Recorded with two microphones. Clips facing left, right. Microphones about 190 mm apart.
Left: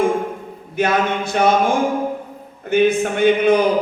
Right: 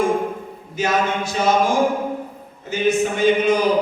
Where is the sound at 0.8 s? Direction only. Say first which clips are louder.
Left 2 dB; 55° left (ahead or behind).